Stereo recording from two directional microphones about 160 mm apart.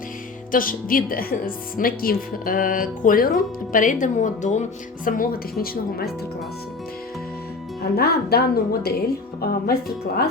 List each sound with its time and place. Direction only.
0.5 s a woman's voice: 60° left (ahead or behind)
5.0 s a woman's voice: 60° left (ahead or behind)
7.8 s speech: 75° left (ahead or behind)